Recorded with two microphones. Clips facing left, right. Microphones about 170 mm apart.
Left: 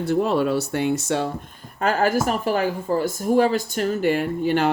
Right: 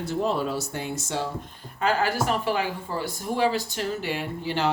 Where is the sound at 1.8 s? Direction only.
45° left (ahead or behind).